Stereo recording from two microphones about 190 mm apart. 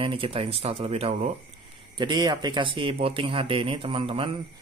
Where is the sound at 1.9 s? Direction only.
25° right (ahead or behind).